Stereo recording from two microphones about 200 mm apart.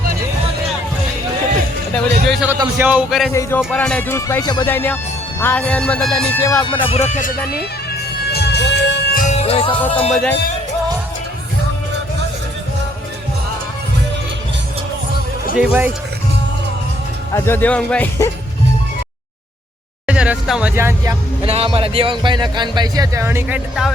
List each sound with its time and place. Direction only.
1.9 s music: centre (ahead or behind)
2.6 s speech: 10° right (ahead or behind)
3.7 s music: 5° left (ahead or behind); by 7.3 s 40° left (ahead or behind)
8.3 s music: 55° left (ahead or behind)
9.2 s music: 30° left (ahead or behind)
10.1 s speech: 5° left (ahead or behind)
15.5 s speech: 5° right (ahead or behind)
17.3 s music: 10° left (ahead or behind)
20.1 s vehicle: 5° right (ahead or behind)
21.4 s speech: 30° right (ahead or behind); by 23.6 s 10° right (ahead or behind)